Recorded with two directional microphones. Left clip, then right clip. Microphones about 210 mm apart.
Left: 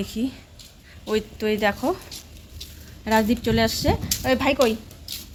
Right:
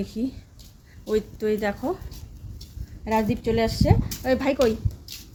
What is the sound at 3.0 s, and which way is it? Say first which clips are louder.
Speech: left 3 dB; 40° left (ahead or behind).